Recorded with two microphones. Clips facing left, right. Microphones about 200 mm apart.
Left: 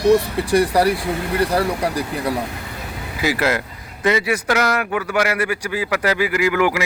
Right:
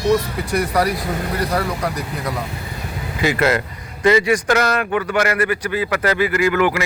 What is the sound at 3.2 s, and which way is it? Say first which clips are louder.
A man's voice: right 2 dB; 5° left (ahead or behind).